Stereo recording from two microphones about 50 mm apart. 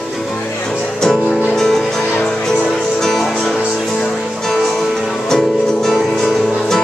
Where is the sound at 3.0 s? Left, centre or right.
Centre.